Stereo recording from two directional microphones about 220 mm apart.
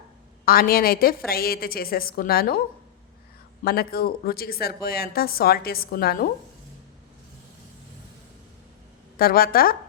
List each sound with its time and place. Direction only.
0.4 s a woman's voice: 40° left (ahead or behind)
3.6 s a woman's voice: 45° left (ahead or behind)
9.1 s a woman's voice: 40° left (ahead or behind)